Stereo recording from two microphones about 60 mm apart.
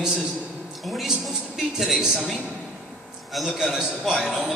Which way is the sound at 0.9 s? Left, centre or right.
Centre.